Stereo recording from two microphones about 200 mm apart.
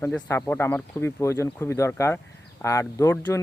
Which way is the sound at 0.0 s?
10° left (ahead or behind).